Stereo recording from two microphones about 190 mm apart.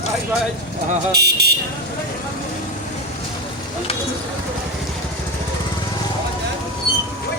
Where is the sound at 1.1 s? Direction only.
60° right (ahead or behind).